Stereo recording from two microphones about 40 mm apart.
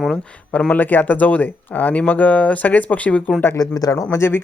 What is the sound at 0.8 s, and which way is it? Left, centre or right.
Speech, left.